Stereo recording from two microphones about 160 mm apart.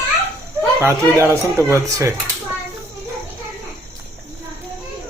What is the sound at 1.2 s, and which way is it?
Speech, 15° right (ahead or behind).